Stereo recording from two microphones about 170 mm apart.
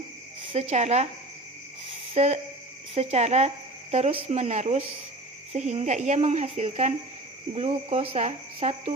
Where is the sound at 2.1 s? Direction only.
40° right (ahead or behind).